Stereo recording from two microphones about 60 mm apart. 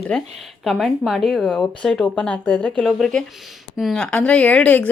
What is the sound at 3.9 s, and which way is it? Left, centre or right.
Speech, centre.